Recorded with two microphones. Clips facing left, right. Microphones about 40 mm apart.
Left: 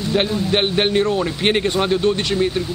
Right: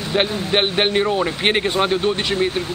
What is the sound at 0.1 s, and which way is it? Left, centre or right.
Speech, centre.